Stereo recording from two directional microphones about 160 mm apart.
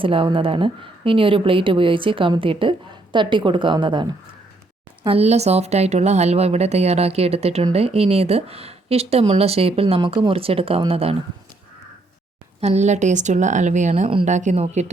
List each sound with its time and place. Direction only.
0.0 s a woman's voice: 35° right (ahead or behind)
12.5 s speech: 40° right (ahead or behind)